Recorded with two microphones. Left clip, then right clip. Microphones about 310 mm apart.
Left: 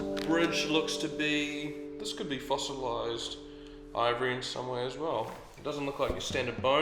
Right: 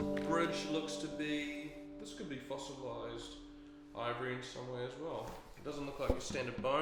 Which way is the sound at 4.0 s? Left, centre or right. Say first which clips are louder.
Left 11 dB; right.